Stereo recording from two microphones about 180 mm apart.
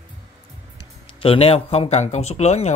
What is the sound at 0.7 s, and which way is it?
Speech, 30° left (ahead or behind).